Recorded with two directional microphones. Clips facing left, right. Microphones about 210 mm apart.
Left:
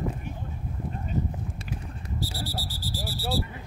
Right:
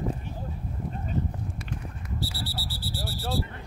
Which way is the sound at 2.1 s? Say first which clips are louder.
Left 1 dB; 40° left (ahead or behind).